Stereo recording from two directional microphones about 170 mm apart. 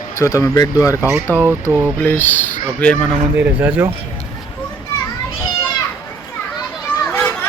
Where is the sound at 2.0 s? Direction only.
10° left (ahead or behind).